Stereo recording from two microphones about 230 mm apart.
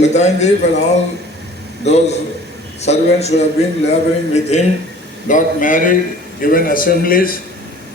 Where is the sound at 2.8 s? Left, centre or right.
Left.